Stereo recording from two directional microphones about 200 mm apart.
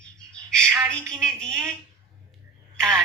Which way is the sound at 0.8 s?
5° left (ahead or behind).